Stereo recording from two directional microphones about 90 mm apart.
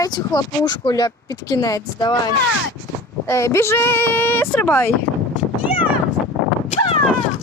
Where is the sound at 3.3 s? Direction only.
30° left (ahead or behind).